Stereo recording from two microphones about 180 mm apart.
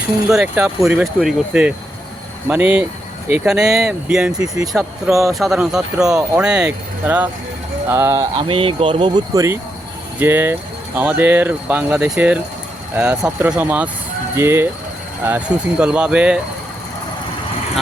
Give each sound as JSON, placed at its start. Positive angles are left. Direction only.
{"t": 0.3, "sound": "speech", "side_deg": -5}